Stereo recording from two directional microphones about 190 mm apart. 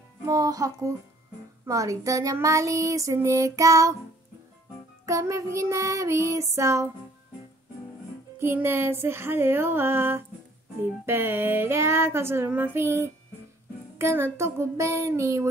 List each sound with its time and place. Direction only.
0.3 s music: 20° right (ahead or behind)
5.0 s music: 15° right (ahead or behind)
8.4 s music: 10° right (ahead or behind)